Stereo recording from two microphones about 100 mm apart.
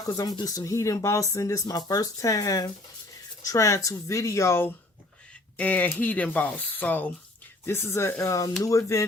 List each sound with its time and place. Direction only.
0.1 s speech: 40° left (ahead or behind)
5.5 s speech: 15° left (ahead or behind); by 9.0 s 30° left (ahead or behind)